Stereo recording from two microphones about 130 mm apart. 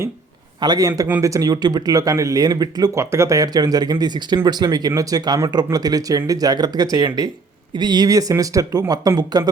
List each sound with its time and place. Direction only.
0.6 s speech: 30° right (ahead or behind)